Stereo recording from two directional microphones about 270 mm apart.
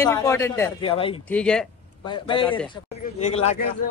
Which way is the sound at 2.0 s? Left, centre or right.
Centre.